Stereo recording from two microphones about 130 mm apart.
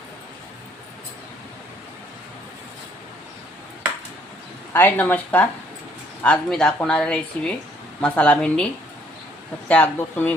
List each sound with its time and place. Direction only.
4.7 s a woman's voice: 15° left (ahead or behind)
9.6 s a woman's voice: 10° left (ahead or behind)